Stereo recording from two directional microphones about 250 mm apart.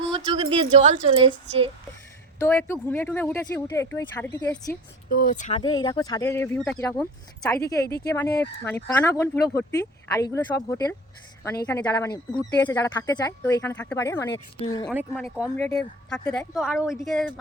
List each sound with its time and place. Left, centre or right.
0.1 s speech: right
2.4 s speech: centre
5.0 s speech: left; by 14.8 s centre
14.8 s speech: centre